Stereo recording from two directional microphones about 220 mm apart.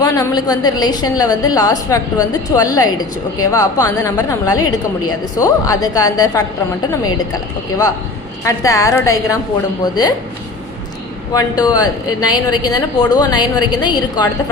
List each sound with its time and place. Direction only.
0.0 s a woman's voice: 15° left (ahead or behind)
8.4 s a woman's voice: 15° left (ahead or behind)
11.3 s a woman's voice: 15° left (ahead or behind)